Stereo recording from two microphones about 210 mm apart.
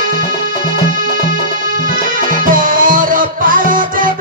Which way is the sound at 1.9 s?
40° right (ahead or behind).